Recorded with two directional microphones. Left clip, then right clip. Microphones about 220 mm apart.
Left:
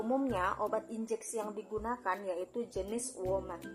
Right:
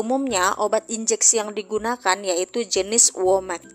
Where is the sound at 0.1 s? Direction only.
40° right (ahead or behind).